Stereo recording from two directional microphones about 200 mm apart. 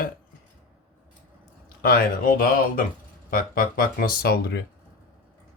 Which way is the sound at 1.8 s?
50° left (ahead or behind).